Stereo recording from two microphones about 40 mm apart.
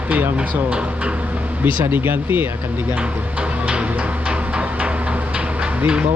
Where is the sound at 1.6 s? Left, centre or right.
Right.